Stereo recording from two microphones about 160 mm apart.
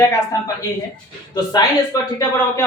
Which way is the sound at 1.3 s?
25° left (ahead or behind).